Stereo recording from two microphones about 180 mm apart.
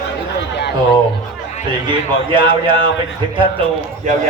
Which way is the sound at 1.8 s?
25° right (ahead or behind).